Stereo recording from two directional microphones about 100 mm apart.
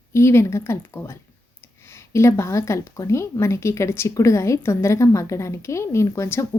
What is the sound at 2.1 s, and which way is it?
A woman's voice, 30° left (ahead or behind).